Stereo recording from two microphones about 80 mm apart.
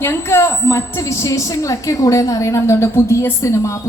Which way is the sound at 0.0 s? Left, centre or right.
Left.